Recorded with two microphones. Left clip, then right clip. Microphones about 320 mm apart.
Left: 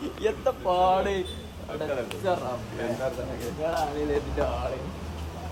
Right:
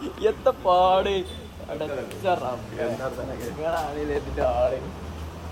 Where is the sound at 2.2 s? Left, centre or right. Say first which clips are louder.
Right 5 dB; right.